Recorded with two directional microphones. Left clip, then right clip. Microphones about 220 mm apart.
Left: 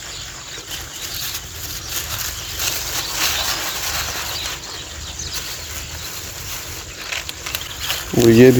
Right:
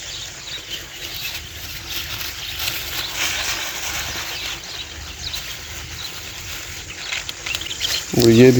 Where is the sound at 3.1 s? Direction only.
20° right (ahead or behind).